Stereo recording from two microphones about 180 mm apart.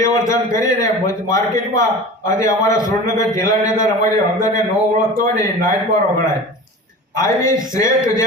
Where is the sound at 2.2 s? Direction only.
15° left (ahead or behind).